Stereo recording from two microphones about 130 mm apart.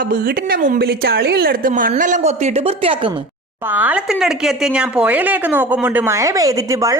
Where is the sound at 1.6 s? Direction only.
90° right.